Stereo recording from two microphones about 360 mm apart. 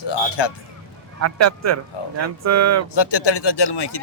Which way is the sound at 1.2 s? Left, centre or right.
Right.